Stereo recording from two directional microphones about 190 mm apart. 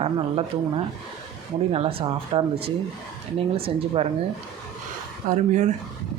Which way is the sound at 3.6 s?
30° right (ahead or behind).